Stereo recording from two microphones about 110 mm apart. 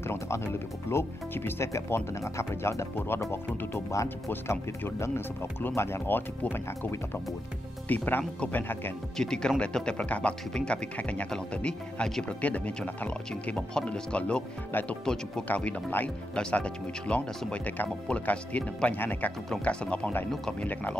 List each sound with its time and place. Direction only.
0.0 s speech: 20° left (ahead or behind)
9.1 s speech: 5° left (ahead or behind)